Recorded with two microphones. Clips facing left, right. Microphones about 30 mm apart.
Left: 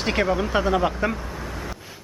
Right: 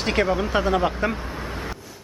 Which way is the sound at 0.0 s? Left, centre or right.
Centre.